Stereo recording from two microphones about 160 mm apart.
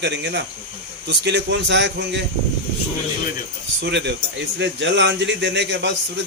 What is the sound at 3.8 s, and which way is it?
Speech, 90° right.